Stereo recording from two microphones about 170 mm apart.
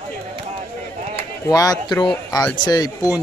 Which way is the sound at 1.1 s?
20° left (ahead or behind).